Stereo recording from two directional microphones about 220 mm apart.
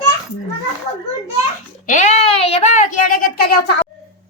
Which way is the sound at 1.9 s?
30° left (ahead or behind).